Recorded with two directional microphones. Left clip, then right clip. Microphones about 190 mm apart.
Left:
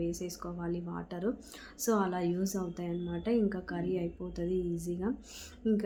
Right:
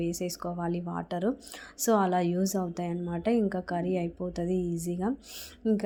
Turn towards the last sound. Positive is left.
turn(degrees=-35)  # may be behind; listen again after turning